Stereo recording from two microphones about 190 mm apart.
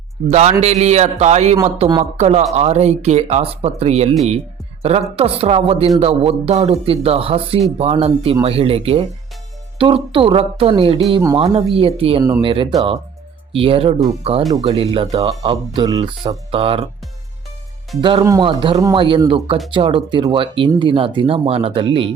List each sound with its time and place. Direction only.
0.3 s speech: 35° right (ahead or behind)
18.0 s speech: 25° right (ahead or behind)